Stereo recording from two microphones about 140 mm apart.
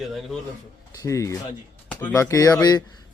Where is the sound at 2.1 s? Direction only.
25° left (ahead or behind).